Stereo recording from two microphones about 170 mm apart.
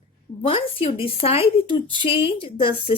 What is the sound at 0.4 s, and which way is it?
A woman's voice, 35° left (ahead or behind).